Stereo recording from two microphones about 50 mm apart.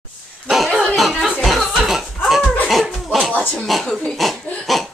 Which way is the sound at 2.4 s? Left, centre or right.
Left.